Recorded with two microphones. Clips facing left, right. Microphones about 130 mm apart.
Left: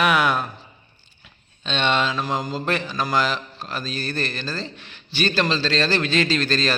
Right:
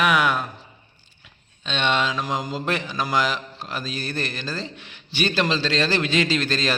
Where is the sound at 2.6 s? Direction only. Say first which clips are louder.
Left 1 dB; 15° right (ahead or behind).